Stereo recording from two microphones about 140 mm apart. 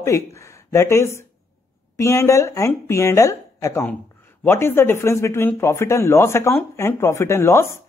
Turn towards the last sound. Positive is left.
turn(degrees=20)  # may be behind; listen again after turning